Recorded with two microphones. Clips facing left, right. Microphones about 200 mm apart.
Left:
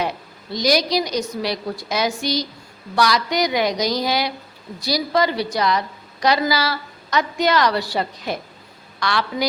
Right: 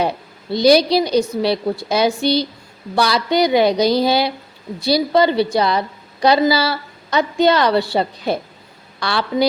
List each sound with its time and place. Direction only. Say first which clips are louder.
0.0 s a woman's voice: right 5 dB; 30° right (ahead or behind)